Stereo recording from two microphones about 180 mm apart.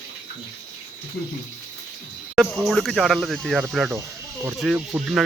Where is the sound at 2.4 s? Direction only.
Centre (ahead or behind).